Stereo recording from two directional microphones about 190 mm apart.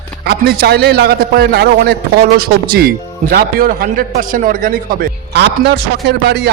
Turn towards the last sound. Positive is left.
turn(degrees=-60)  # may be behind; listen again after turning